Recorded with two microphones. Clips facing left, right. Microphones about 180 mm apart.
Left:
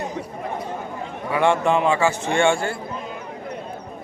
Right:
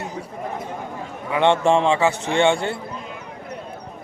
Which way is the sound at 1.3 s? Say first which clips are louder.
Right 2 dB; 25° right (ahead or behind).